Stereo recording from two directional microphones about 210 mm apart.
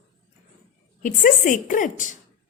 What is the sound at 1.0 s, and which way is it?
A woman's voice, 40° left (ahead or behind).